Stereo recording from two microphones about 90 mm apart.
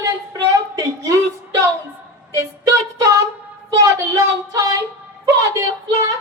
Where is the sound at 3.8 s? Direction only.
35° right (ahead or behind).